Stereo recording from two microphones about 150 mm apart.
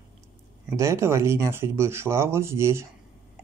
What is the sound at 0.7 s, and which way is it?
Speech, 20° right (ahead or behind).